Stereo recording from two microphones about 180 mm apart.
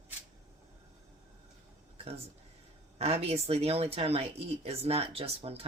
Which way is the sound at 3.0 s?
35° right (ahead or behind).